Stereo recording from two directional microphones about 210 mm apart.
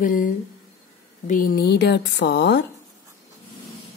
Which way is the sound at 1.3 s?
45° left (ahead or behind).